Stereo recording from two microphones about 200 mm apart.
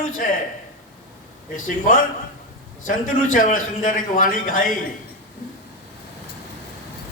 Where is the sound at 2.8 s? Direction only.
40° left (ahead or behind).